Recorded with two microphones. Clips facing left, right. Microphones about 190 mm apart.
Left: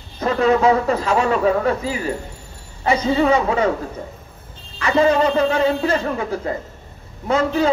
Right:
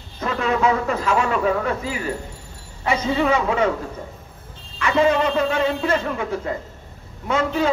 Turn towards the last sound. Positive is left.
turn(degrees=35)  # may be behind; listen again after turning